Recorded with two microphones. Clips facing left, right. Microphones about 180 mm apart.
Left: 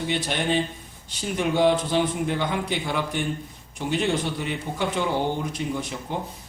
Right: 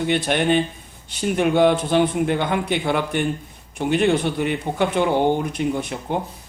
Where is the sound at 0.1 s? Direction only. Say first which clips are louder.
Right 6 dB; 60° right (ahead or behind).